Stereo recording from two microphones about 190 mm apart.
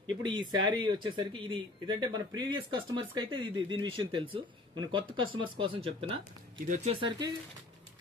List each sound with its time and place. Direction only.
0.0 s speech: 25° right (ahead or behind)
6.6 s speech: 40° right (ahead or behind)